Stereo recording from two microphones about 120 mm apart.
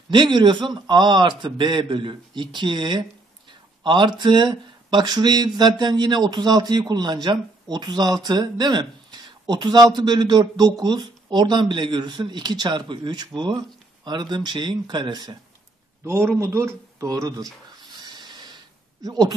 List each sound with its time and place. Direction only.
0.1 s speech: 40° right (ahead or behind)
16.0 s speech: 20° right (ahead or behind)
17.9 s a sound: 35° right (ahead or behind)
19.0 s speech: 30° right (ahead or behind)